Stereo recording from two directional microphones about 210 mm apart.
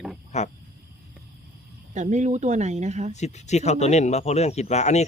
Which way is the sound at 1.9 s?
35° right (ahead or behind).